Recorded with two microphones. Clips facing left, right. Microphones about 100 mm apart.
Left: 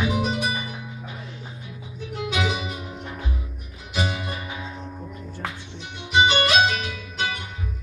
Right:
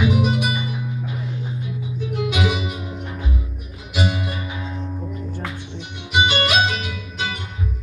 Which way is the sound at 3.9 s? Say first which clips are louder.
Right 4 dB; 10° right (ahead or behind).